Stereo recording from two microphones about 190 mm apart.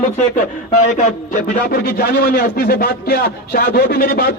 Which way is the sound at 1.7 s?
55° left (ahead or behind).